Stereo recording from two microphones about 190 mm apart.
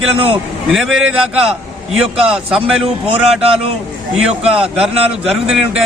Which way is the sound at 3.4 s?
35° right (ahead or behind).